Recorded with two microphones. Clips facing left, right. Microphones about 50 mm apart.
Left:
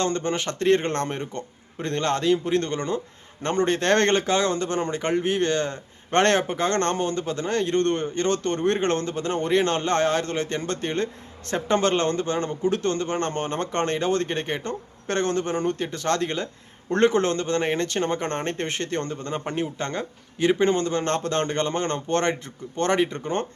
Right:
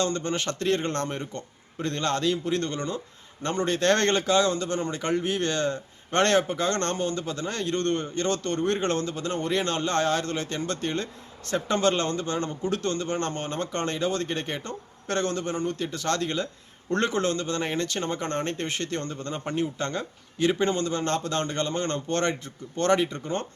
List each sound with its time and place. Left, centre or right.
0.0 s speech: left